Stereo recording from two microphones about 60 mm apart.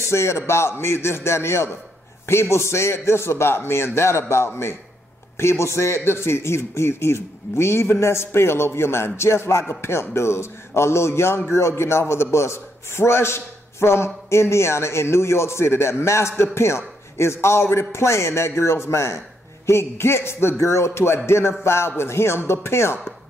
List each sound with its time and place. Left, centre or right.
0.1 s a man's voice: left